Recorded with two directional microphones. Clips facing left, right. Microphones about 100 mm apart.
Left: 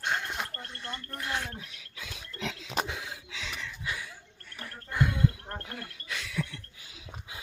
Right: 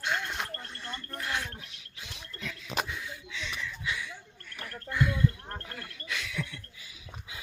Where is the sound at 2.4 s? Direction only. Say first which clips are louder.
Left 2 dB; 90° left.